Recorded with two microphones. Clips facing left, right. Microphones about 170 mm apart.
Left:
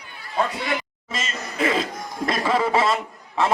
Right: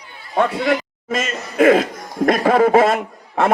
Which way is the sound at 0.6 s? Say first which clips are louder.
Right 8 dB; 45° right (ahead or behind).